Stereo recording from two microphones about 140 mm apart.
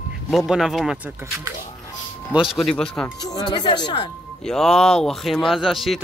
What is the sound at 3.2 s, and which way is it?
Speech, 30° left (ahead or behind).